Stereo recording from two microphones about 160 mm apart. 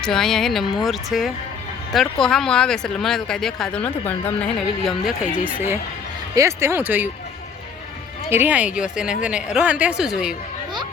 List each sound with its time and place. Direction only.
0.0 s speech: 5° left (ahead or behind)
5.5 s speech: 15° right (ahead or behind)
8.3 s speech: 10° right (ahead or behind)